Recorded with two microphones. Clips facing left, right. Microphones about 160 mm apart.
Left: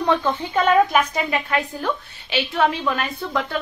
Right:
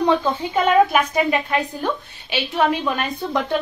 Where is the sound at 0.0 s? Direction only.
15° right (ahead or behind).